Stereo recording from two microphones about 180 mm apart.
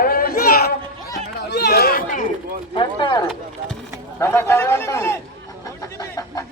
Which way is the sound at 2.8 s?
25° left (ahead or behind).